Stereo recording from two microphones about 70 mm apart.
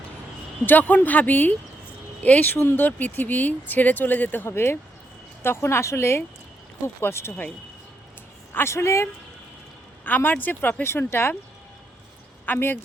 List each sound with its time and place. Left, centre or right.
0.6 s speech: left
4.4 s a woman's voice: left
8.5 s a woman's voice: left
10.0 s speech: left
10.8 s a woman's voice: left
12.5 s speech: left